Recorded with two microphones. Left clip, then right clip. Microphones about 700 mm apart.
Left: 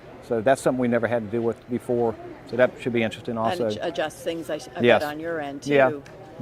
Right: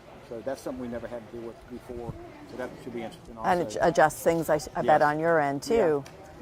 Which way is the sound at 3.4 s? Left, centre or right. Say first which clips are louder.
Right 1 dB; right.